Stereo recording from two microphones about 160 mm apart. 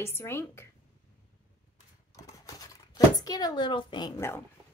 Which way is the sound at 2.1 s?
20° left (ahead or behind).